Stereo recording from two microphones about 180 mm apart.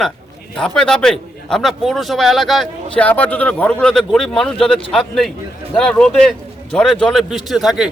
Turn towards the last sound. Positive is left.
turn(degrees=0)  # may be behind; listen again after turning